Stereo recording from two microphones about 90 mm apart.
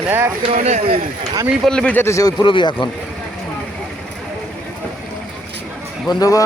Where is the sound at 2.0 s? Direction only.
35° left (ahead or behind).